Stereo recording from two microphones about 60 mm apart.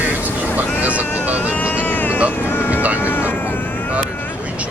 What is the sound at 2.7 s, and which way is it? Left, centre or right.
Vehicle, right.